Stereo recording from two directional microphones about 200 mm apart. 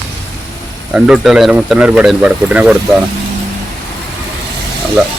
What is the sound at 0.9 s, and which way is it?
Speech, 5° right (ahead or behind).